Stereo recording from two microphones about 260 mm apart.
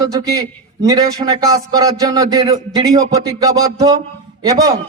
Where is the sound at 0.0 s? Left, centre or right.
Centre.